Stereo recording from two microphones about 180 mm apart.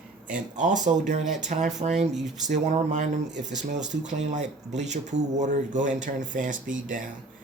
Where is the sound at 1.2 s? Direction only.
Centre (ahead or behind).